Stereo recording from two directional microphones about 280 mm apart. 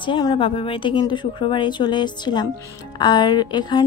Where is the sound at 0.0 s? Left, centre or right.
Centre.